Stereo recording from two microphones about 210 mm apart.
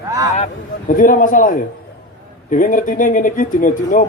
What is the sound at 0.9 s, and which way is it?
Speech, 40° left (ahead or behind).